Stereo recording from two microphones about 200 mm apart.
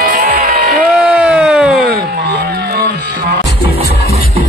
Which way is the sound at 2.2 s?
50° right (ahead or behind).